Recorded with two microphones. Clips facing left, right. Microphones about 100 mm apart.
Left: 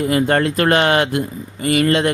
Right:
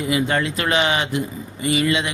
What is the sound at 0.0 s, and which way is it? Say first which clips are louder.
Speech: left 5 dB; 50° left (ahead or behind).